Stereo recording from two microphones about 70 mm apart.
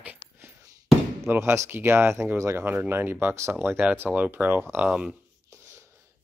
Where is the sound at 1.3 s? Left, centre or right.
Right.